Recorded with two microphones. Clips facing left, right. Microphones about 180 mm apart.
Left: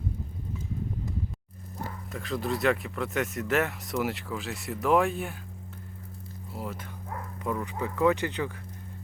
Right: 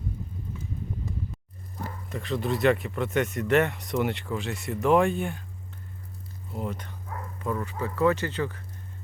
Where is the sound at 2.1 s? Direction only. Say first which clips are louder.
Right 2 dB; centre (ahead or behind).